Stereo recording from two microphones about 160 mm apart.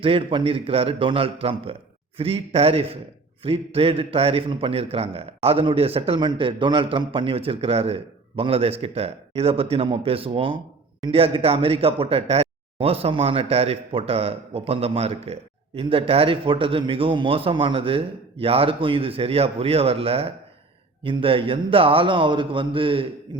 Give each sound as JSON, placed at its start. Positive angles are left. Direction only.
{"t": 0.0, "sound": "speech", "side_deg": -35}